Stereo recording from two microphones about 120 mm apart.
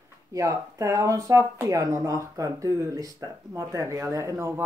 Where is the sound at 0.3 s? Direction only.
30° right (ahead or behind).